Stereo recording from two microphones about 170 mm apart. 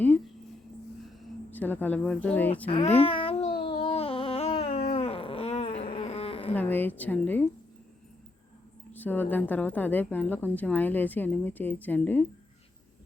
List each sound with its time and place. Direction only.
1.5 s a woman's voice: 10° left (ahead or behind)
2.6 s speech: 35° left (ahead or behind)
3.0 s babbling: 35° left (ahead or behind)
3.7 s a sound: 35° left (ahead or behind)
6.5 s a woman's voice: 10° left (ahead or behind)
8.9 s a woman's voice: 10° left (ahead or behind)